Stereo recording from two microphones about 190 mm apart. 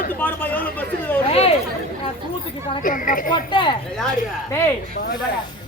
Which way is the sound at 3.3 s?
25° left (ahead or behind).